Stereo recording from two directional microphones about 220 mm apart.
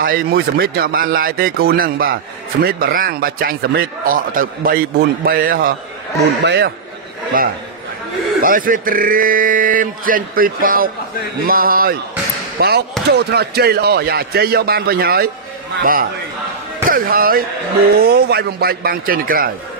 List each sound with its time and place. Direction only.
0.0 s a man's voice: 40° right (ahead or behind)
6.4 s speech: 50° right (ahead or behind)
7.3 s a man's voice: 40° right (ahead or behind)